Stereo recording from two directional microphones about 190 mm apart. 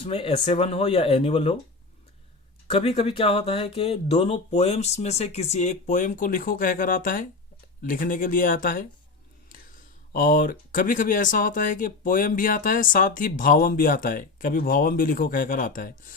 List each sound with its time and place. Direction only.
0.0 s speech: 30° left (ahead or behind)
2.7 s speech: 30° left (ahead or behind); by 8.9 s 45° left (ahead or behind)
10.1 s speech: 45° left (ahead or behind)